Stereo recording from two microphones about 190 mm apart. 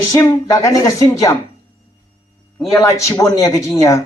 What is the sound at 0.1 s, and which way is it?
Speech, 20° left (ahead or behind).